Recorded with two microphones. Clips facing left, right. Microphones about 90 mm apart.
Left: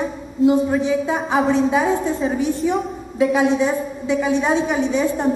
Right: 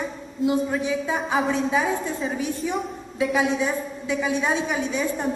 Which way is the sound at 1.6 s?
15° left (ahead or behind).